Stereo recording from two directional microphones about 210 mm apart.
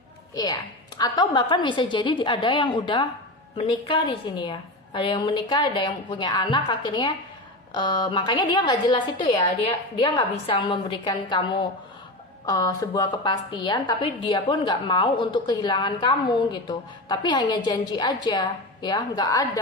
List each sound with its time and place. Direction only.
0.9 s a woman's voice: 20° left (ahead or behind)